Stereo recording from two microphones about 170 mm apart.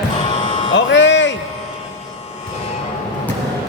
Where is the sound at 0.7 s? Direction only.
90° left.